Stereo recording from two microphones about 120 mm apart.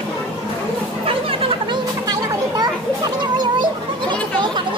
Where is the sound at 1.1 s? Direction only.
50° right (ahead or behind).